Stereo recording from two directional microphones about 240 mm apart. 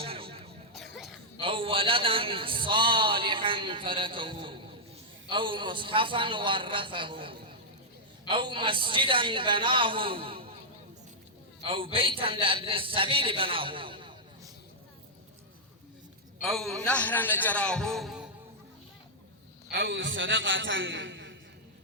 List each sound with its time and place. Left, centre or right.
0.0 s music: right
0.7 s cough: centre
1.4 s a man's voice: right
11.6 s a man's voice: right
16.4 s a man's voice: centre
19.7 s a man's voice: right